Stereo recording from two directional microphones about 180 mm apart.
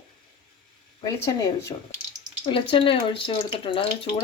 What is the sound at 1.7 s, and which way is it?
Speech, 25° left (ahead or behind).